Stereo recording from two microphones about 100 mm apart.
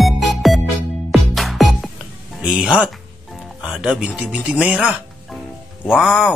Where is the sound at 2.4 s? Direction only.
10° right (ahead or behind).